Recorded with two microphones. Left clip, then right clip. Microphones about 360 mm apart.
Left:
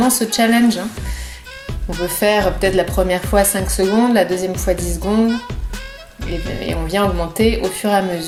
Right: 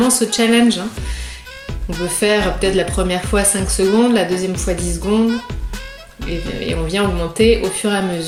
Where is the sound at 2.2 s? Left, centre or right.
Left.